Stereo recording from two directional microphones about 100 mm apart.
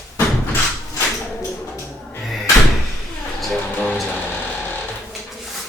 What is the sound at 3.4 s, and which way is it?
Music, centre (ahead or behind).